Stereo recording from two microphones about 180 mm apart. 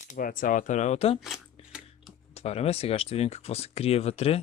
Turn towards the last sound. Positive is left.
turn(degrees=35)  # may be behind; listen again after turning